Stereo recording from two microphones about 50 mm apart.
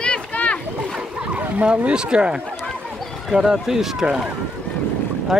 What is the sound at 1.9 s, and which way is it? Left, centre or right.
Speech, centre.